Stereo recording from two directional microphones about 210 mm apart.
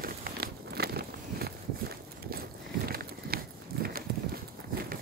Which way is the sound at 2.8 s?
45° right (ahead or behind).